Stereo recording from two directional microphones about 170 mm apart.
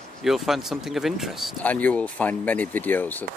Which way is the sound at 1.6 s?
10° left (ahead or behind).